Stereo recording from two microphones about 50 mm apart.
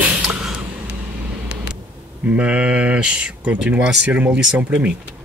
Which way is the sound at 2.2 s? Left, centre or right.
Right.